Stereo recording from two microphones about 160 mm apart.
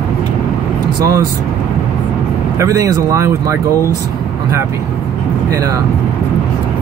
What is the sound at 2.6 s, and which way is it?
Speech, 20° right (ahead or behind).